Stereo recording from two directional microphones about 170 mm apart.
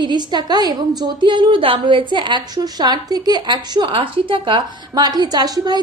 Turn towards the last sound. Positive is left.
turn(degrees=-25)  # may be behind; listen again after turning